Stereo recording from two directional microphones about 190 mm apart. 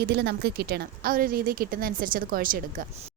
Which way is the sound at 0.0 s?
60° right (ahead or behind).